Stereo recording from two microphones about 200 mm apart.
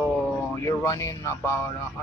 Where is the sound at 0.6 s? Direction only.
15° left (ahead or behind).